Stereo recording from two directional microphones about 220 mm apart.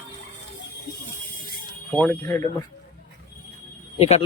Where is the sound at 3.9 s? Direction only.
30° left (ahead or behind).